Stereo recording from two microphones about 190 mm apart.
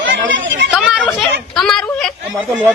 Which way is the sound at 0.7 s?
5° right (ahead or behind).